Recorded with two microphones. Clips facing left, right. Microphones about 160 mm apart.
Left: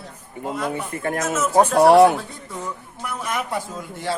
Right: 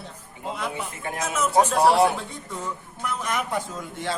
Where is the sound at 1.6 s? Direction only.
65° left (ahead or behind).